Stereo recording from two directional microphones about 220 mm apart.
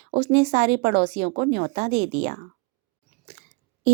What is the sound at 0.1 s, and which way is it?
A woman's voice, 35° right (ahead or behind).